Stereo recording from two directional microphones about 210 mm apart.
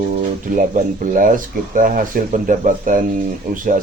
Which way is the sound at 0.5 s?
40° right (ahead or behind).